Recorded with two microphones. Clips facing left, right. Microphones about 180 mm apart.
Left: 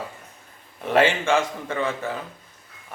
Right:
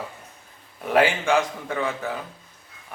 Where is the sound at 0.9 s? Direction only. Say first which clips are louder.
Even; centre (ahead or behind).